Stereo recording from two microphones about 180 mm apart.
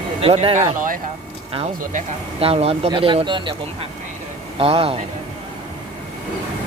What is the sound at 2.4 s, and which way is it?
Speech, 35° right (ahead or behind).